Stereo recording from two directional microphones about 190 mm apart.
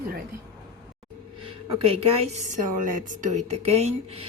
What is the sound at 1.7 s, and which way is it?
Speech, 30° right (ahead or behind).